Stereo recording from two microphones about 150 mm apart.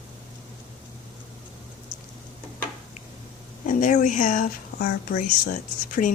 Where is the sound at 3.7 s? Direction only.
60° left (ahead or behind).